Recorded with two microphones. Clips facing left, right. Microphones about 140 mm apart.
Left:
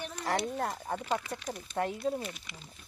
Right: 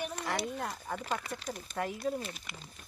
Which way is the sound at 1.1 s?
25° left (ahead or behind).